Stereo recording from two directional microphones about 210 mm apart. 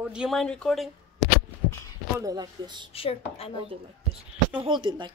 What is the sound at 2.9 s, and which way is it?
Speech, 25° left (ahead or behind).